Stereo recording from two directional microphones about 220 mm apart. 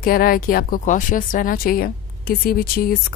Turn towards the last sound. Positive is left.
turn(degrees=45)  # may be behind; listen again after turning